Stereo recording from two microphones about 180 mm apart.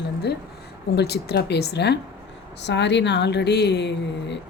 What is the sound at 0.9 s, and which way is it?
A woman's voice, 65° left (ahead or behind).